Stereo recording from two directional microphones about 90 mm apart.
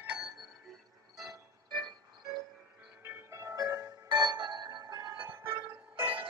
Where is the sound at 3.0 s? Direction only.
30° right (ahead or behind).